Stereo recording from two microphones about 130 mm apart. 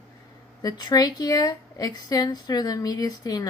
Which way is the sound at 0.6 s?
30° left (ahead or behind).